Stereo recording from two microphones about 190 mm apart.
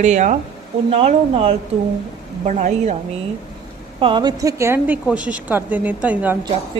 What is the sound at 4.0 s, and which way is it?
A woman's voice, 25° right (ahead or behind).